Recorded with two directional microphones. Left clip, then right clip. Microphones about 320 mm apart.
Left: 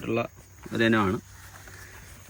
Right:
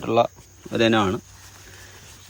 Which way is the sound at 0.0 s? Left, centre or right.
Centre.